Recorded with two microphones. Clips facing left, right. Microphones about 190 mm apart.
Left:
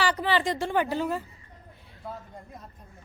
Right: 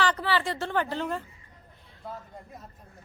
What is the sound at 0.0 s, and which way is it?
A woman's voice, 10° left (ahead or behind).